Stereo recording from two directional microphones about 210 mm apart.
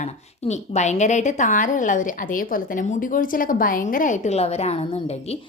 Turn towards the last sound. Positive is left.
turn(degrees=30)  # may be behind; listen again after turning